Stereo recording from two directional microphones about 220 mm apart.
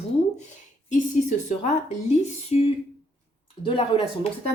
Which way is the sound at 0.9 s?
35° left (ahead or behind).